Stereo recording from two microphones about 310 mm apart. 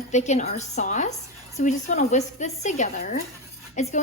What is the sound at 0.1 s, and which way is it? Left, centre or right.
A woman's voice, left.